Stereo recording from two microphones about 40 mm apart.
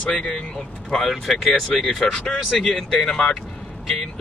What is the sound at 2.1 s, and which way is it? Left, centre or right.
Speech, centre.